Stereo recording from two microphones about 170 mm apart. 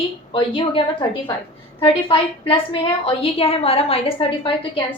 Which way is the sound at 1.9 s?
30° left (ahead or behind).